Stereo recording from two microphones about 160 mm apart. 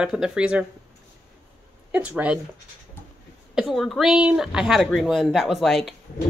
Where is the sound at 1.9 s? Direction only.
10° right (ahead or behind).